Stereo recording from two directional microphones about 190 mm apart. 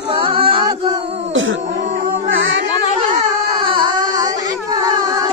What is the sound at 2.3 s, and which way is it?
Music, 80° right.